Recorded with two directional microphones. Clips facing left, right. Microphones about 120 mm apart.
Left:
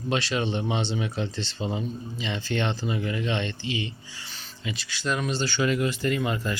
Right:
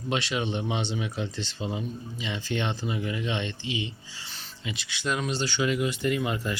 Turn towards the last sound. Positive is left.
turn(degrees=-15)  # may be behind; listen again after turning